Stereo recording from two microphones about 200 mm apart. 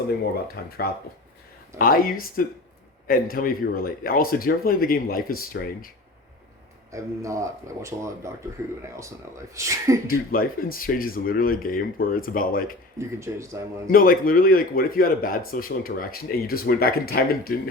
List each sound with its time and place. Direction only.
0.6 s speech: 50° left (ahead or behind)
1.8 s speech: 45° left (ahead or behind)
6.9 s speech: 15° right (ahead or behind)
10.1 s speech: 45° left (ahead or behind)
13.0 s speech: 15° right (ahead or behind)
13.9 s speech: 45° left (ahead or behind)